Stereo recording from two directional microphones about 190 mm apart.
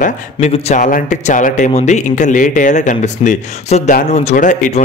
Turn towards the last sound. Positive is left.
turn(degrees=40)  # may be behind; listen again after turning